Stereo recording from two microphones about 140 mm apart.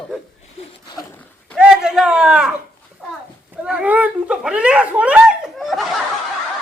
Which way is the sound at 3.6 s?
10° right (ahead or behind).